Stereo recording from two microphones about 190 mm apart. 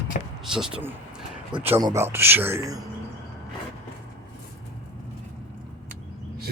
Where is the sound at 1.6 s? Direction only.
15° right (ahead or behind).